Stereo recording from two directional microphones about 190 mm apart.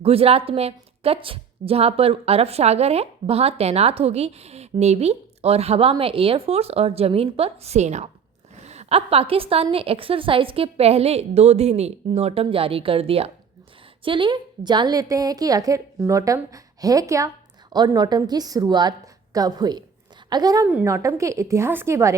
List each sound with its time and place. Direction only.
0.0 s a woman's voice: 30° right (ahead or behind); by 22.1 s 15° right (ahead or behind)